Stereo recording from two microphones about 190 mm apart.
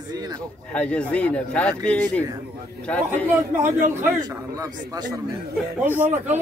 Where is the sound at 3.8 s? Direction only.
15° right (ahead or behind).